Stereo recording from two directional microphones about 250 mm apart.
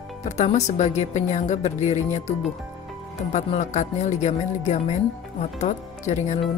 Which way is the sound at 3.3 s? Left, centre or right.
Left.